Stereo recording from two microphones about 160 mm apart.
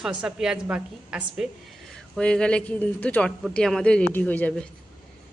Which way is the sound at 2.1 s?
5° left (ahead or behind).